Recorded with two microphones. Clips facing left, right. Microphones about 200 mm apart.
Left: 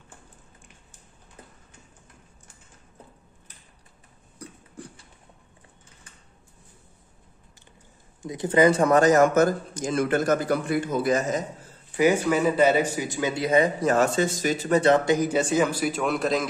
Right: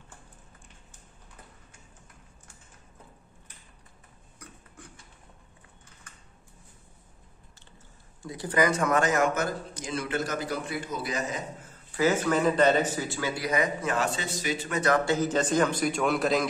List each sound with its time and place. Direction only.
4.4 s a sound: 35° left (ahead or behind)
8.2 s a man's voice: 20° left (ahead or behind); by 11.4 s 45° left (ahead or behind)
12.0 s speech: 10° left (ahead or behind); by 14.8 s 45° left (ahead or behind)
14.8 s speech: 25° left (ahead or behind)
15.1 s a man's voice: 10° left (ahead or behind)